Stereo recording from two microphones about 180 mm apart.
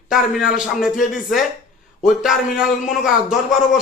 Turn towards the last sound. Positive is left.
turn(degrees=0)  # may be behind; listen again after turning